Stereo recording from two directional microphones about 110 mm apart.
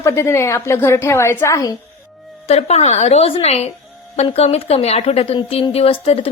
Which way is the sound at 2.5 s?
75° left (ahead or behind).